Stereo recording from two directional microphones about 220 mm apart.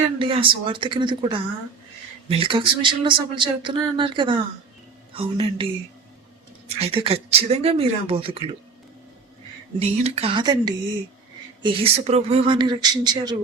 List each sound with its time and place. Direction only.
0.2 s speech: 25° right (ahead or behind)
6.7 s speech: 25° right (ahead or behind)
9.7 s speech: 25° right (ahead or behind)